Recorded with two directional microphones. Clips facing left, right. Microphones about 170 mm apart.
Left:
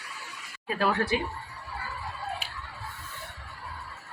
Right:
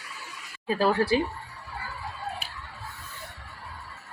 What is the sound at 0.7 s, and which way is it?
Speech, 30° right (ahead or behind).